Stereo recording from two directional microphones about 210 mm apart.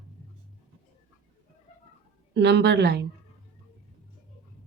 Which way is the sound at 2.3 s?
55° right (ahead or behind).